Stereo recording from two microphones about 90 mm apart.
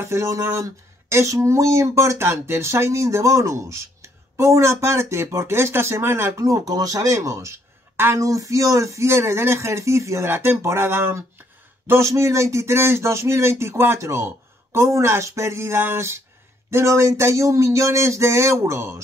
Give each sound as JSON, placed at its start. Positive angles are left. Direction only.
{"t": 0.0, "sound": "speech", "side_deg": -30}